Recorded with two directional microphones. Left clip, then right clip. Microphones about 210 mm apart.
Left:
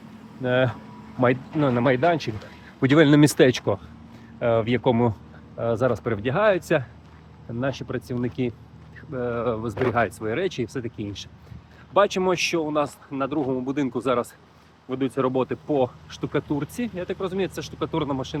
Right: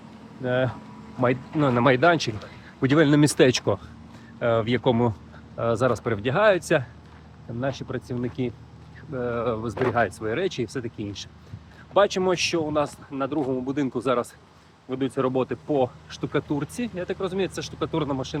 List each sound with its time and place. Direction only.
0.4 s speech: 20° left (ahead or behind)
1.5 s speech: centre (ahead or behind)
2.8 s speech: 15° left (ahead or behind)
7.6 s speech: 25° left (ahead or behind); by 18.3 s 5° left (ahead or behind)